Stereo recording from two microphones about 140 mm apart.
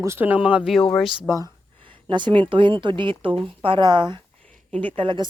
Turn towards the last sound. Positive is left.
turn(degrees=-35)  # may be behind; listen again after turning